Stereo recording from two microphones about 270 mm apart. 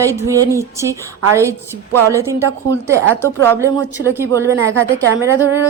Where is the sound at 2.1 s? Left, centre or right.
Centre.